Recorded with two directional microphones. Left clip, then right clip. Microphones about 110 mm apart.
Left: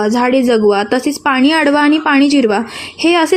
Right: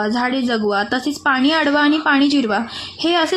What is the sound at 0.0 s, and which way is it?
A woman's voice, 35° left (ahead or behind).